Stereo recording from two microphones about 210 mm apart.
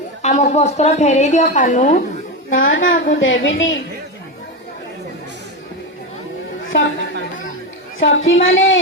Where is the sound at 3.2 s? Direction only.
65° left (ahead or behind).